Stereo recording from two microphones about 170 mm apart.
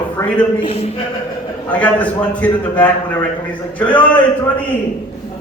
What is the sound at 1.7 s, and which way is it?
A man's voice, 10° left (ahead or behind).